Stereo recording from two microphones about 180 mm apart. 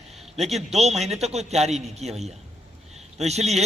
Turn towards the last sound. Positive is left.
turn(degrees=-35)  # may be behind; listen again after turning